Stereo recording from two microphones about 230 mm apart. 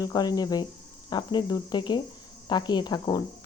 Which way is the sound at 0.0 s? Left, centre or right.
Centre.